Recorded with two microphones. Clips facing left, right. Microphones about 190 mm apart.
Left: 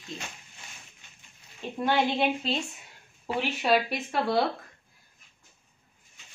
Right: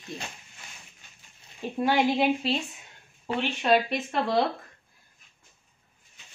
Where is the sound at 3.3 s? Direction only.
5° left (ahead or behind).